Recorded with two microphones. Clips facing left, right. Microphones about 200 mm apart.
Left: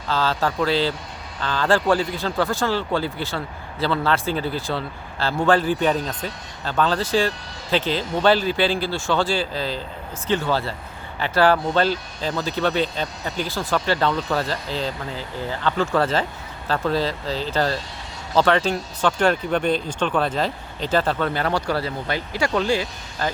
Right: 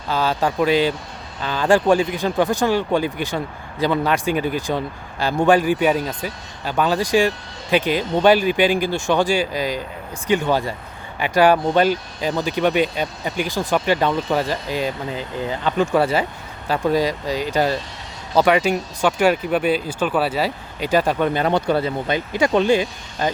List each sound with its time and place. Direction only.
0.1 s speech: 15° right (ahead or behind)